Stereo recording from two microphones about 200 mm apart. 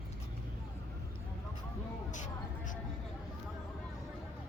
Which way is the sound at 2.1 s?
40° left (ahead or behind).